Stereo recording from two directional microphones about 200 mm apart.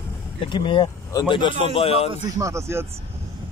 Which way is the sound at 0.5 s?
25° left (ahead or behind).